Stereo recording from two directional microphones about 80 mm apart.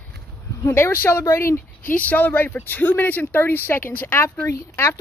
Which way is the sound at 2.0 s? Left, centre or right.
Centre.